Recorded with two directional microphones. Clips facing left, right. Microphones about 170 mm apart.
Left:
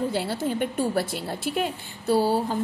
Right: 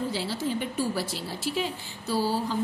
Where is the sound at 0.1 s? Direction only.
55° left (ahead or behind).